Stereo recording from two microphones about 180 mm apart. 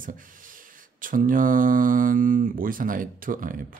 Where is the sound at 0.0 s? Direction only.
50° right (ahead or behind).